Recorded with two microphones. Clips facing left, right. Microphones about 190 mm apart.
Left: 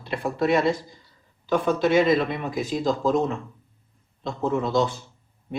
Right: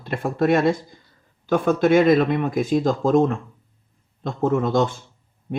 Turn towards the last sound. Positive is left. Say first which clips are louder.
# right 3 dB
turn(degrees=-50)  # may be behind; listen again after turning